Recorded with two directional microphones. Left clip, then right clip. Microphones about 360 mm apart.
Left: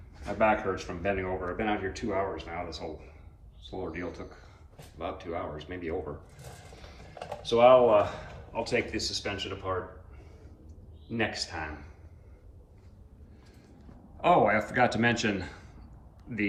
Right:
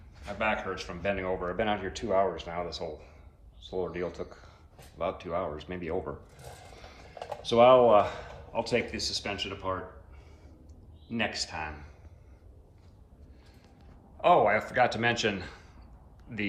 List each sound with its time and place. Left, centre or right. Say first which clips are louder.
0.3 s speech: left 4 dB; centre
7.5 s speech: even; right
11.1 s speech: even; centre
14.2 s speech: even; centre